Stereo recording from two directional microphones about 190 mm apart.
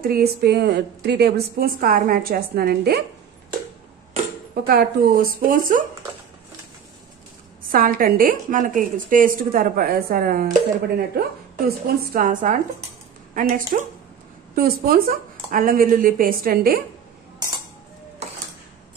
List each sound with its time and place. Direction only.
0.0 s a woman's voice: 55° right (ahead or behind)
4.6 s a woman's voice: 50° right (ahead or behind)
7.7 s a woman's voice: 50° right (ahead or behind)